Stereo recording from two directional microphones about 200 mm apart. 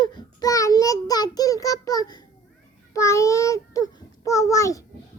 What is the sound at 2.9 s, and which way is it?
Child singing, 15° left (ahead or behind).